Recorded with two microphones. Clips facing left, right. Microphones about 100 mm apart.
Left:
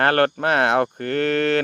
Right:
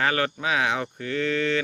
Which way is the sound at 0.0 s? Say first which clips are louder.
Left 7 dB; 60° left (ahead or behind).